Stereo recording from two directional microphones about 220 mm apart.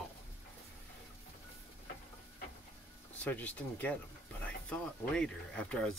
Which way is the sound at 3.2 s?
5° left (ahead or behind).